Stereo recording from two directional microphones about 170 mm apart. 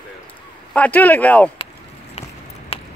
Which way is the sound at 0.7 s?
10° left (ahead or behind).